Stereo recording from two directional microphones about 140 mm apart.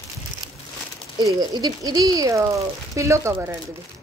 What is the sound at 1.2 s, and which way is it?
Speech, 25° right (ahead or behind).